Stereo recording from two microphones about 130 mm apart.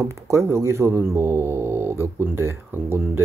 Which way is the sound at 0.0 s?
20° right (ahead or behind).